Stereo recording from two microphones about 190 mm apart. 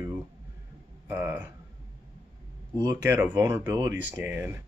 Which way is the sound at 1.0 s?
10° right (ahead or behind).